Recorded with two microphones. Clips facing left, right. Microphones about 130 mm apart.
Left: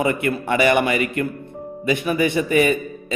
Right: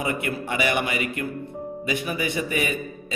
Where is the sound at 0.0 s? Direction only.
55° left (ahead or behind).